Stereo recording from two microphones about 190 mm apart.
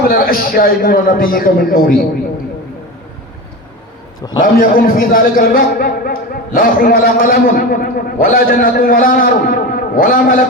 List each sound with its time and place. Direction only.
0.1 s a man's voice: 50° left (ahead or behind)
4.5 s a man's voice: 50° left (ahead or behind)